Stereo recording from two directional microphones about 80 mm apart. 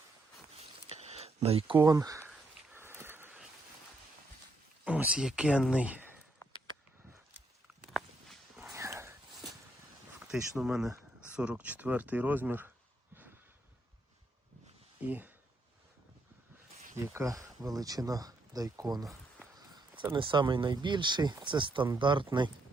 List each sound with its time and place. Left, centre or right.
1.8 s speech: right
2.7 s a sound: right
4.9 s speech: centre
7.9 s a sound: centre
8.7 s horse: right
10.2 s speech: centre; by 12.7 s right
15.0 s speech: right
17.0 s speech: right
20.1 s speech: right